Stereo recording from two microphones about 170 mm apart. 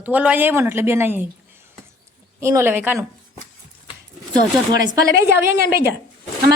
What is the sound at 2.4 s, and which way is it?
Speech, 15° right (ahead or behind).